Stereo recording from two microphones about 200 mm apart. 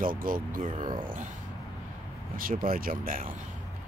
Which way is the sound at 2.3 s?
45° right (ahead or behind).